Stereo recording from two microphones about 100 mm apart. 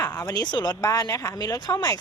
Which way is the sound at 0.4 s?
40° left (ahead or behind).